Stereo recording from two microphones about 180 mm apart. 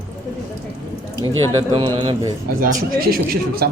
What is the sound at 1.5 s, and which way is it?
Speech, 25° right (ahead or behind).